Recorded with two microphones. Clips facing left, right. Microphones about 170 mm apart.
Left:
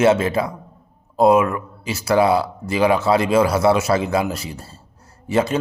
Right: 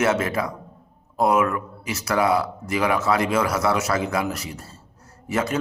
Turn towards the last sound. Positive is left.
turn(degrees=30)  # may be behind; listen again after turning